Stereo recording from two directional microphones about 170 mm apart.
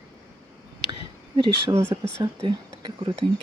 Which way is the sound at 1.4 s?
30° right (ahead or behind).